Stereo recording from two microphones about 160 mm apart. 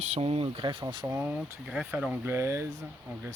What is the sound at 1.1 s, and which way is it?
Speech, 10° right (ahead or behind).